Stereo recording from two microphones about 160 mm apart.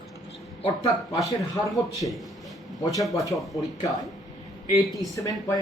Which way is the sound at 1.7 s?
Centre (ahead or behind).